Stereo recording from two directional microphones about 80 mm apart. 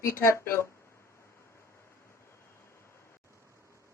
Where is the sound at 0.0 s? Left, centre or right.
Left.